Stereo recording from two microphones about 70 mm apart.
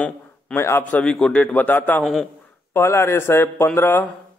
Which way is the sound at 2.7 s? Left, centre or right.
Left.